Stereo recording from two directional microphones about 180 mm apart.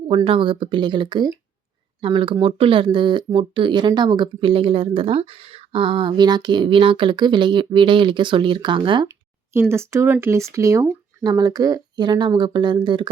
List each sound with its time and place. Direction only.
0.1 s speech: 30° right (ahead or behind)
9.0 s speech: 15° right (ahead or behind)